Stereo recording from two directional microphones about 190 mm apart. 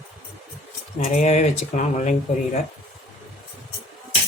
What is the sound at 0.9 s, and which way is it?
Speech, 40° left (ahead or behind).